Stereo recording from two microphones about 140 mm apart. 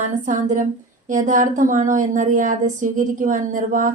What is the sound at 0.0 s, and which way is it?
Speech, 60° right (ahead or behind).